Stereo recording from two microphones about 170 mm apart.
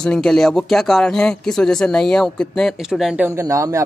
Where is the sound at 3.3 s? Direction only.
20° right (ahead or behind).